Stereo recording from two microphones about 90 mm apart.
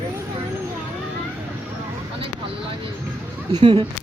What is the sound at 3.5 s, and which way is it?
Speech, 60° right (ahead or behind).